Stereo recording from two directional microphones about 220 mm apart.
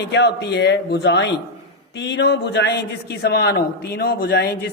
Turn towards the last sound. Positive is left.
turn(degrees=45)  # may be behind; listen again after turning